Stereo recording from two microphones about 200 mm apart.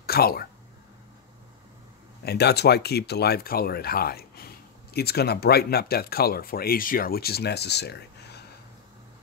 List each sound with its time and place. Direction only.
0.0 s speech: 50° left (ahead or behind)
2.2 s speech: 55° left (ahead or behind)